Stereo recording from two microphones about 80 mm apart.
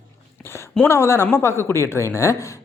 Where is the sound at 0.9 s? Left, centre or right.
Left.